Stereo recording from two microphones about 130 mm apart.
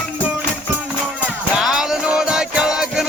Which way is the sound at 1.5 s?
5° right (ahead or behind).